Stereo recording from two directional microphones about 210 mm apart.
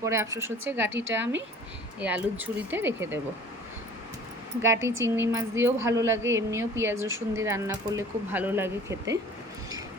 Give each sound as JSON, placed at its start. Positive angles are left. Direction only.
{"t": 0.0, "sound": "speech", "side_deg": -15}
{"t": 1.2, "sound": "speech", "side_deg": -60}
{"t": 2.0, "sound": "speech", "side_deg": -5}
{"t": 4.6, "sound": "speech", "side_deg": -15}